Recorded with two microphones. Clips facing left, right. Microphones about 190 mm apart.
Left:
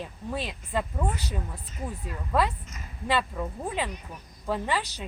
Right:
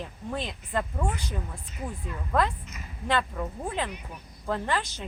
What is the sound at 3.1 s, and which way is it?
A woman's voice, 5° left (ahead or behind).